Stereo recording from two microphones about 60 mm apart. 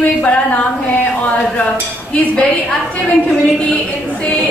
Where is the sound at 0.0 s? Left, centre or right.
Left.